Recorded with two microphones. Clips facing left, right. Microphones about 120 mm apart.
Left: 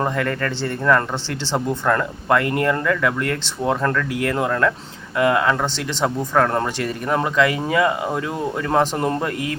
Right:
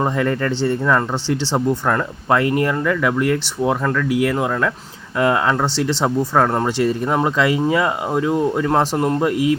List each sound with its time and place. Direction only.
0.0 s speech: 15° right (ahead or behind)
8.6 s a man's voice: 5° right (ahead or behind)
9.2 s speech: 20° right (ahead or behind)